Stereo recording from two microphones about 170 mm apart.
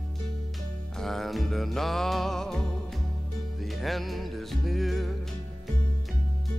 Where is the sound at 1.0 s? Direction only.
Centre (ahead or behind).